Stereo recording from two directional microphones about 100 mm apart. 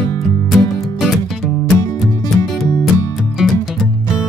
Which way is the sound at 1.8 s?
40° left (ahead or behind).